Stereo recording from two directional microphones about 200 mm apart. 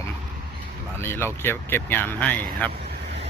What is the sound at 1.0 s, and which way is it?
Speech, 10° left (ahead or behind).